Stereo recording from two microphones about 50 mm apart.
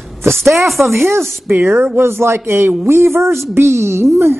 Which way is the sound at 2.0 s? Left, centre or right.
Right.